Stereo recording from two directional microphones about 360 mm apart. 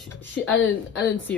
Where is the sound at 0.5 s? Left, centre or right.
Left.